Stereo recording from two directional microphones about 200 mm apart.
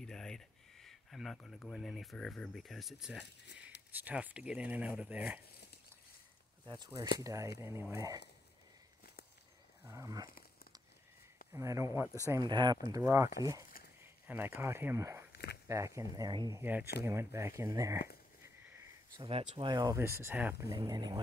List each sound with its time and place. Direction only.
0.0 s speech: 5° left (ahead or behind)
6.6 s speech: 20° right (ahead or behind)
9.8 s speech: 15° right (ahead or behind)
10.2 s crumpling: 45° left (ahead or behind)
11.5 s speech: 15° right (ahead or behind)
19.1 s speech: 30° right (ahead or behind)